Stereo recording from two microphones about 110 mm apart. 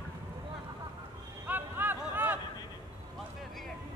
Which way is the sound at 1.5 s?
15° right (ahead or behind).